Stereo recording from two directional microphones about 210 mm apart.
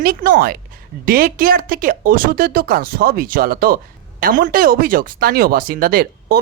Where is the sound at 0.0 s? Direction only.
45° right (ahead or behind).